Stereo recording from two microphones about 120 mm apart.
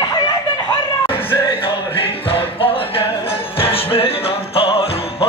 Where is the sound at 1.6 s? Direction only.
50° left (ahead or behind).